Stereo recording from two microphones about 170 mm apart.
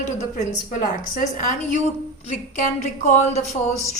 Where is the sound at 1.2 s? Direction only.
45° left (ahead or behind).